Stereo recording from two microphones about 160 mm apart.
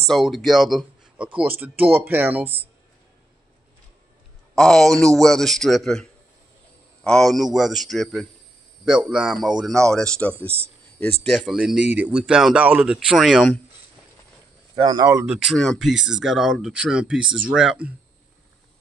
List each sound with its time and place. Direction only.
0.0 s speech: centre (ahead or behind)
4.6 s speech: 5° left (ahead or behind)
14.9 s speech: 20° right (ahead or behind)
15.2 s speech: 5° right (ahead or behind)